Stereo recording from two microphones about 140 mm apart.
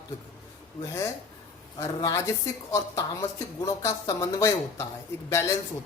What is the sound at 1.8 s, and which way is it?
A woman's voice, 25° left (ahead or behind).